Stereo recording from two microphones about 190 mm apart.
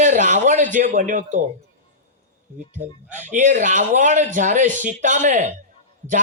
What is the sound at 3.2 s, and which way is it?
Speech, 40° right (ahead or behind).